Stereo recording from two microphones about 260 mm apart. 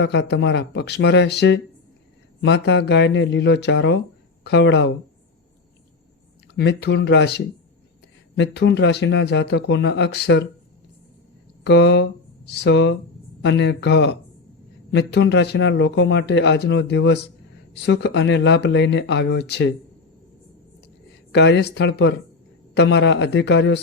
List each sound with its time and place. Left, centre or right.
0.0 s a man's voice: left
6.5 s a man's voice: left
11.6 s a man's voice: left
21.3 s a man's voice: left